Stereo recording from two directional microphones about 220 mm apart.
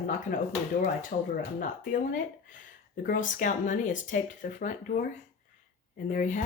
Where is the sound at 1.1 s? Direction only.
35° left (ahead or behind).